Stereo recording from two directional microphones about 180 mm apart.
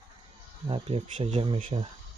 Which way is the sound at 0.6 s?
30° right (ahead or behind).